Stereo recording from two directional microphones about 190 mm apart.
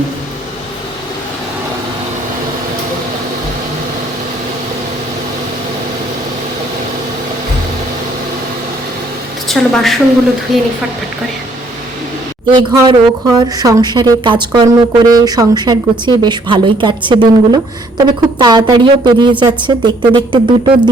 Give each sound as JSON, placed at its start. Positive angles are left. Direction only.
{"t": 9.5, "sound": "a woman's voice", "side_deg": 0}
{"t": 12.5, "sound": "speech", "side_deg": -20}